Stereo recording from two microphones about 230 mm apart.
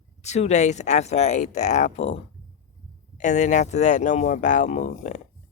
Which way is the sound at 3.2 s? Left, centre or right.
Left.